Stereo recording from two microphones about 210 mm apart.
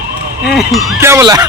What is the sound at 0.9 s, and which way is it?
Speech, 10° right (ahead or behind).